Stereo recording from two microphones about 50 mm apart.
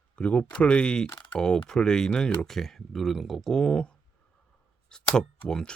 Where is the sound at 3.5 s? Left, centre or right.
Centre.